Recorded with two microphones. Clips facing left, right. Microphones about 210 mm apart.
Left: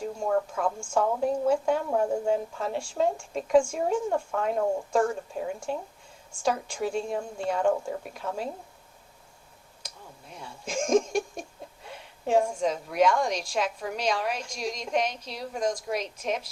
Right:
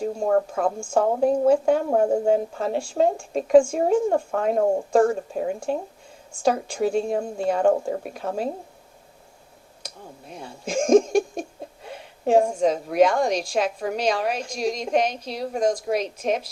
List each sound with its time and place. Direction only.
0.0 s a woman's voice: 40° right (ahead or behind)
10.3 s speech: 35° right (ahead or behind)
12.2 s a woman's voice: 35° right (ahead or behind)